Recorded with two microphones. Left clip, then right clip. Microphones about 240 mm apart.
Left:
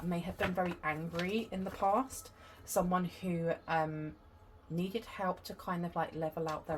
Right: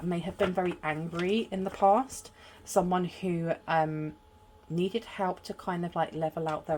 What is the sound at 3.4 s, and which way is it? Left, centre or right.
Speech, right.